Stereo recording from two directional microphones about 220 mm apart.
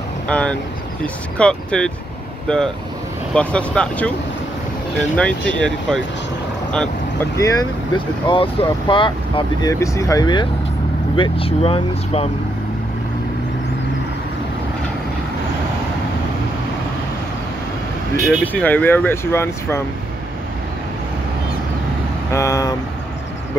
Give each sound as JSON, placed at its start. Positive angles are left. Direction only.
{"t": 0.3, "sound": "speech", "side_deg": 5}
{"t": 5.1, "sound": "speech", "side_deg": 5}
{"t": 6.7, "sound": "vehicle", "side_deg": 5}
{"t": 7.3, "sound": "speech", "side_deg": 15}
{"t": 18.2, "sound": "speech", "side_deg": 5}
{"t": 22.3, "sound": "speech", "side_deg": 15}